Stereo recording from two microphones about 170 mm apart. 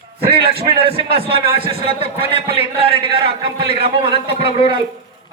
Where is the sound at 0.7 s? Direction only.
35° right (ahead or behind).